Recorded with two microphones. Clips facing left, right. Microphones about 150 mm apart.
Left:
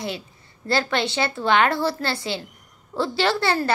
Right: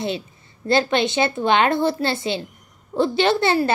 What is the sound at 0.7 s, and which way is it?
A woman's voice, 20° right (ahead or behind).